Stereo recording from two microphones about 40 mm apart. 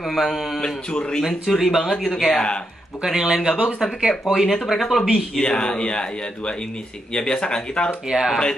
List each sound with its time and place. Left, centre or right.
0.1 s speech: centre
1.6 s speech: centre
2.2 s speech: left
3.0 s speech: centre
4.3 s speech: centre
5.4 s speech: left
8.1 s speech: centre